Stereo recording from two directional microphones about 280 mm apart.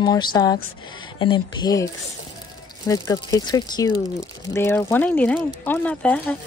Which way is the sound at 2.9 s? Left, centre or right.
Centre.